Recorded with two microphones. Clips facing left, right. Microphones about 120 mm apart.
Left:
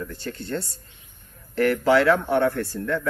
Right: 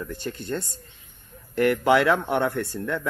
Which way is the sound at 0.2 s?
20° right (ahead or behind).